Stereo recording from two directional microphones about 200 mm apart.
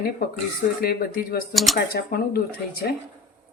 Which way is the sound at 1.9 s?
50° left (ahead or behind).